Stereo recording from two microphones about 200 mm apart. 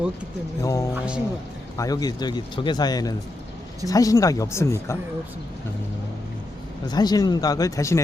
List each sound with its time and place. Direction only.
0.6 s speech: 15° left (ahead or behind)
6.8 s speech: 20° left (ahead or behind)